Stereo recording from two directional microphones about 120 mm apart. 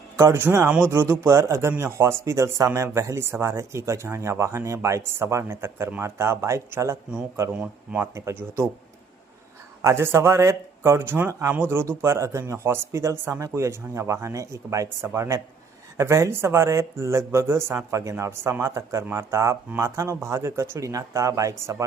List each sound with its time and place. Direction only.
0.2 s speech: 20° right (ahead or behind)
8.0 s speech: 25° right (ahead or behind)
9.8 s speech: 20° right (ahead or behind)